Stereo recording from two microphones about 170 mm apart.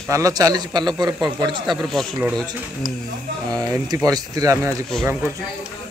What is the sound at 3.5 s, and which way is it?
A man's voice, 20° right (ahead or behind).